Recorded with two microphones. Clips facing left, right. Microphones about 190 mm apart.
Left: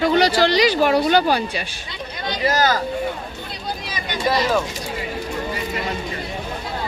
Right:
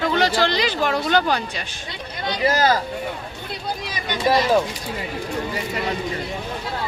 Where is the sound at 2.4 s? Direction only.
30° right (ahead or behind).